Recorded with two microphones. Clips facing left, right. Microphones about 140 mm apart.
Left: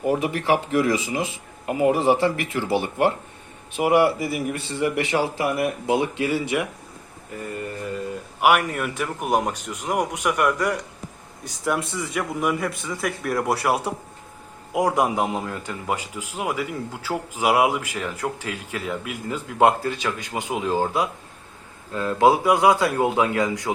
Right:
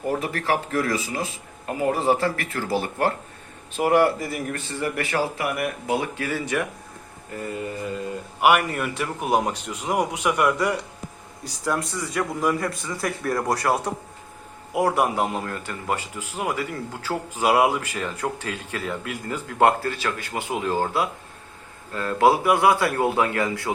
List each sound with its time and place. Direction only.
0.0 s speech: 15° left (ahead or behind)
2.3 s speech: 15° left (ahead or behind)
7.3 s speech: centre (ahead or behind)
9.8 s a man's voice: 5° right (ahead or behind)
12.1 s speech: 10° left (ahead or behind)